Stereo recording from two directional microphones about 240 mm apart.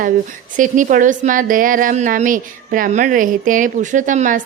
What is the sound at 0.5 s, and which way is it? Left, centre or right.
A woman's voice, right.